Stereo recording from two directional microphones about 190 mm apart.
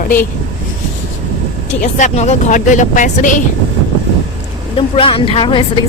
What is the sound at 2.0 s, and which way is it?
Speech, 40° left (ahead or behind).